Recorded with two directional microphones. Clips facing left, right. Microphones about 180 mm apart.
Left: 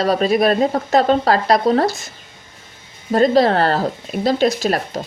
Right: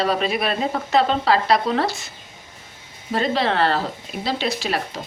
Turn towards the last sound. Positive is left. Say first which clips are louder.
# left 6 dB
turn(degrees=45)  # may be behind; listen again after turning